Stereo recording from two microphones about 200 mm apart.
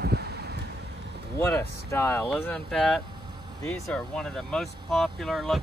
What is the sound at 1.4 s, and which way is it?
Speech, 15° left (ahead or behind).